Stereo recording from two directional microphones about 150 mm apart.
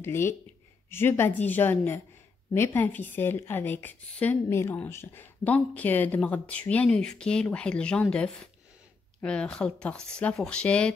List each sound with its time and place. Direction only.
0.0 s a woman's voice: 15° left (ahead or behind)